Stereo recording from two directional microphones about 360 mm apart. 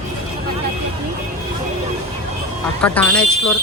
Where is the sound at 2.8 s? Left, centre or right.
Centre.